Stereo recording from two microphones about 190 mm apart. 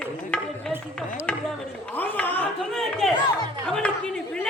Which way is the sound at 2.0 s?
10° left (ahead or behind).